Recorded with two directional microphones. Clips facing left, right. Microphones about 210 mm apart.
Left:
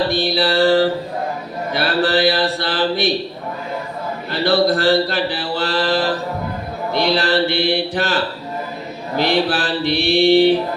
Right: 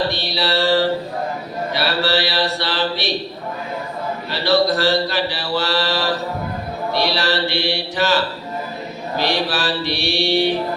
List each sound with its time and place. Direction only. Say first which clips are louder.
0.1 s mantra: left 4 dB; 50° left (ahead or behind)
1.7 s a sound: left 3 dB; 50° left (ahead or behind)
4.3 s speech: left 2 dB; 55° left (ahead or behind)
6.9 s mantra: left 4 dB; 55° left (ahead or behind)